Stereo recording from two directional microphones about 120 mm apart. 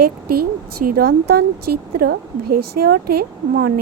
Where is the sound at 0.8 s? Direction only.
90° right.